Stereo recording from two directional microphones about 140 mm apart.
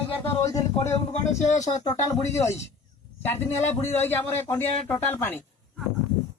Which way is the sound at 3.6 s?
55° left (ahead or behind).